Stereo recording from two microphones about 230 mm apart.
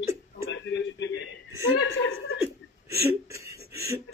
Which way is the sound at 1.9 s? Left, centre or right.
Left.